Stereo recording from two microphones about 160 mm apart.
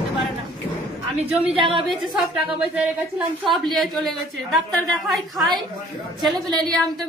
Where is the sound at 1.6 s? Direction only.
35° right (ahead or behind).